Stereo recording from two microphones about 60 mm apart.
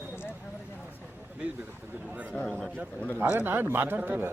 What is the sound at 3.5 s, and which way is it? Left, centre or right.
Speech, right.